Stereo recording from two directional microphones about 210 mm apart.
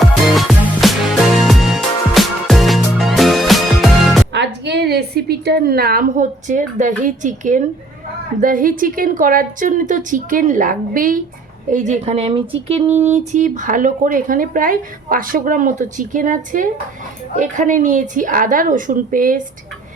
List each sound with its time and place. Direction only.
0.0 s music: centre (ahead or behind)
4.3 s a woman's voice: 55° right (ahead or behind)